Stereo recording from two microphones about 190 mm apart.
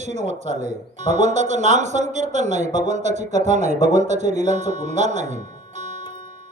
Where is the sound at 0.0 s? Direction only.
35° right (ahead or behind).